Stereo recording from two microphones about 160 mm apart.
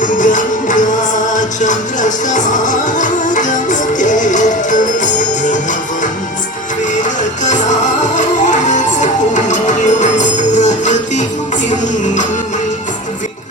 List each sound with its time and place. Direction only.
0.0 s music: 55° left (ahead or behind)
7.0 s music: 50° left (ahead or behind)